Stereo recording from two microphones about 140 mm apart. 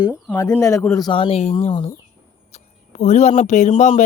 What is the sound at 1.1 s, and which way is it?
Speech, 45° left (ahead or behind).